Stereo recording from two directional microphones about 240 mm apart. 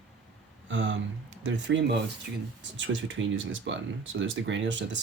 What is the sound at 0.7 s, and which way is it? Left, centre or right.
Speech, right.